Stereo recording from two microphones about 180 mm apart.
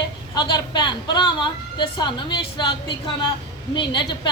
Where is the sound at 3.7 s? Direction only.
25° left (ahead or behind).